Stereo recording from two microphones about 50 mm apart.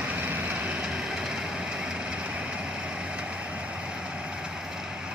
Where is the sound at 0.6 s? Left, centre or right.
Right.